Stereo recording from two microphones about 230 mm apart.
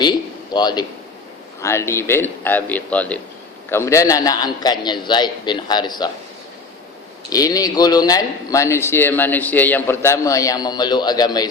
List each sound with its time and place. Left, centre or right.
0.0 s a man's voice: centre
7.3 s a man's voice: centre